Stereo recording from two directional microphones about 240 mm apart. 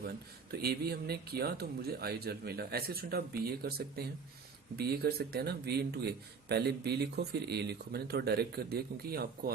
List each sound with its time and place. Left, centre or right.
0.5 s speech: right